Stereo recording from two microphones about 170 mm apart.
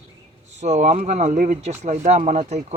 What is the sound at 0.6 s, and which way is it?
Speech, 45° right (ahead or behind).